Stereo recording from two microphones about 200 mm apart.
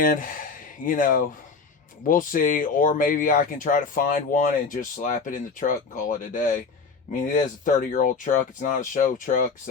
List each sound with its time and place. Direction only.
0.0 s speech: 45° left (ahead or behind)